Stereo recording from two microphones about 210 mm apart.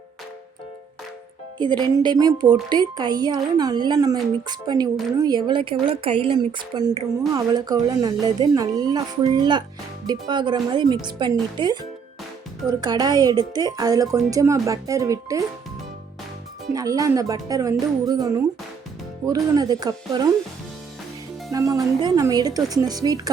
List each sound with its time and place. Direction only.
1.8 s a woman's voice: 20° right (ahead or behind)
16.7 s speech: 15° right (ahead or behind)
21.7 s speech: 15° right (ahead or behind)